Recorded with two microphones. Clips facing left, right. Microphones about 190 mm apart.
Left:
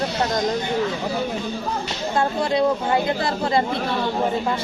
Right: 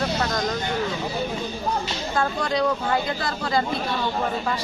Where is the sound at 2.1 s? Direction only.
25° left (ahead or behind).